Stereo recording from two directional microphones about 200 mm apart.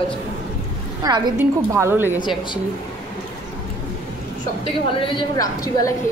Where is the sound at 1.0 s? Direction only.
20° right (ahead or behind).